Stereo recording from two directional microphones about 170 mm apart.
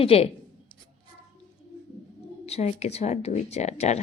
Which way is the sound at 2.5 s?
40° left (ahead or behind).